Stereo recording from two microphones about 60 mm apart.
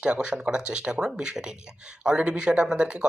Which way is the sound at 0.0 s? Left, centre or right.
Centre.